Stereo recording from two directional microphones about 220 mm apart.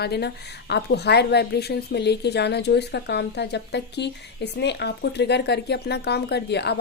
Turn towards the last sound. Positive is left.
turn(degrees=50)  # may be behind; listen again after turning